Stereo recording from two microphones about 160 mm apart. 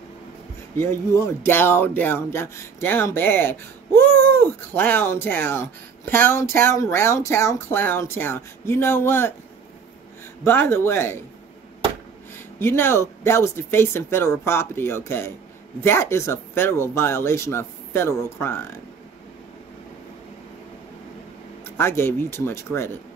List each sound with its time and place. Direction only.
0.7 s speech: 15° left (ahead or behind)
10.4 s speech: 15° left (ahead or behind)
12.5 s speech: 15° left (ahead or behind)
21.6 s speech: 15° left (ahead or behind)